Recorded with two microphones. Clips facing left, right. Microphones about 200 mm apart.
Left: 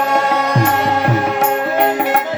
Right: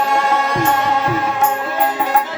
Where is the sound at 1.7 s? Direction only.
70° left (ahead or behind).